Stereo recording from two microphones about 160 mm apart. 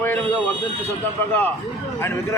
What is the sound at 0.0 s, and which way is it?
Buzzer, 10° left (ahead or behind).